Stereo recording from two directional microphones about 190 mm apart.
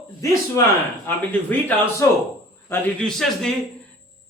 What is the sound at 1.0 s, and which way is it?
Speech, 10° left (ahead or behind).